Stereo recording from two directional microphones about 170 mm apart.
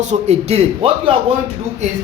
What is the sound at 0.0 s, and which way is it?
A man's voice, 40° right (ahead or behind).